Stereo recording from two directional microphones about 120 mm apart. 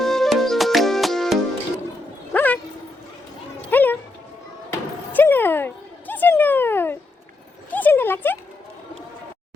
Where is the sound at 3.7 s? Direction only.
15° left (ahead or behind).